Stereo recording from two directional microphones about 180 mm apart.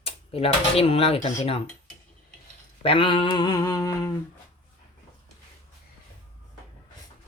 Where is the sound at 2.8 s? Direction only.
30° left (ahead or behind).